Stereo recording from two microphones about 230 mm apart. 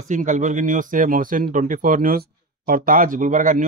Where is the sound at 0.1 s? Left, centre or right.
Right.